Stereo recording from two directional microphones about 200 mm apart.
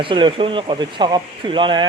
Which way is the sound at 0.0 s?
25° right (ahead or behind).